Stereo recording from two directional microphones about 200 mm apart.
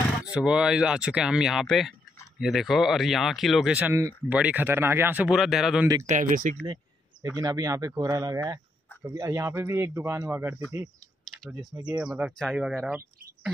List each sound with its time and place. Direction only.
0.2 s speech: 5° right (ahead or behind)
6.0 s speech: 40° right (ahead or behind)
6.6 s a sound: 20° right (ahead or behind)
7.2 s speech: 20° right (ahead or behind)
12.0 s speech: centre (ahead or behind)